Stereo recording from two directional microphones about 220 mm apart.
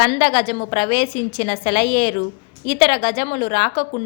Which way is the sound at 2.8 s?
40° left (ahead or behind).